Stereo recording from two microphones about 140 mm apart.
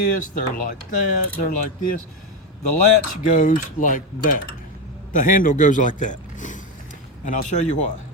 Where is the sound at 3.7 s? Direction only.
70° left (ahead or behind).